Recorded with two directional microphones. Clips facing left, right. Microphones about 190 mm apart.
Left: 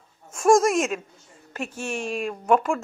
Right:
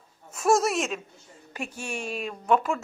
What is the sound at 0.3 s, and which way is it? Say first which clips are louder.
Speech: left 5 dB; 5° right (ahead or behind).